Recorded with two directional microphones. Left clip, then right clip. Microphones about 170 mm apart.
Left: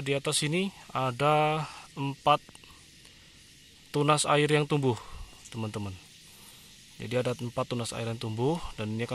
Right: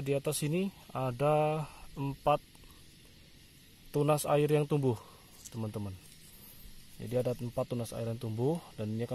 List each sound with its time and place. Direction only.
0.0 s speech: centre (ahead or behind)
3.9 s speech: 5° left (ahead or behind)
4.9 s a sound: 25° left (ahead or behind)
7.0 s speech: 15° left (ahead or behind)